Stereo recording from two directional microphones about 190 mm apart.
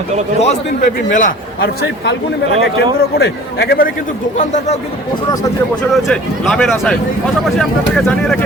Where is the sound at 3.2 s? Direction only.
60° left (ahead or behind).